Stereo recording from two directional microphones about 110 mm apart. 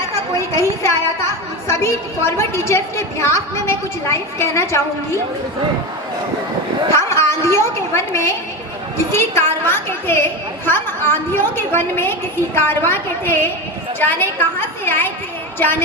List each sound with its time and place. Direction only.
0.3 s a woman's voice: 25° left (ahead or behind)
6.9 s a woman's voice: 25° left (ahead or behind)